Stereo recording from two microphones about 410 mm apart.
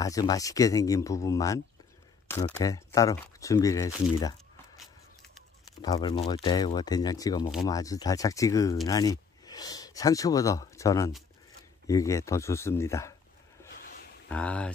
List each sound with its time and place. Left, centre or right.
0.0 s speech: centre
14.3 s speech: centre